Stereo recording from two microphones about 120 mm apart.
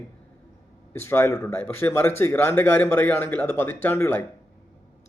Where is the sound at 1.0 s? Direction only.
20° left (ahead or behind).